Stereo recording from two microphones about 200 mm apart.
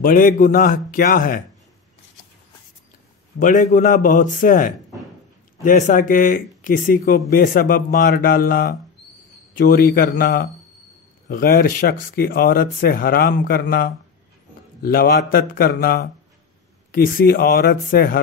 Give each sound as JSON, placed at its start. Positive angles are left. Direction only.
{"t": 0.0, "sound": "speech", "side_deg": 45}
{"t": 3.3, "sound": "a man's voice", "side_deg": 40}